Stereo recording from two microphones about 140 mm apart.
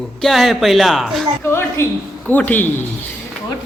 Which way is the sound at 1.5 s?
15° left (ahead or behind).